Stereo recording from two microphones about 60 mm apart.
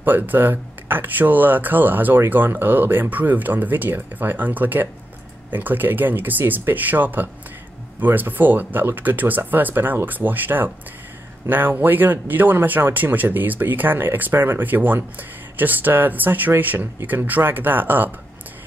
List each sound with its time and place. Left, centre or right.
0.0 s speech: right